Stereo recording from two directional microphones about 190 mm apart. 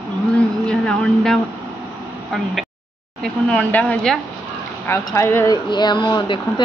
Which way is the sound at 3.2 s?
5° left (ahead or behind).